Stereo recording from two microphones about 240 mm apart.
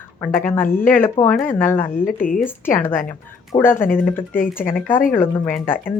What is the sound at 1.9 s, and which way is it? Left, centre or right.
Speech, left.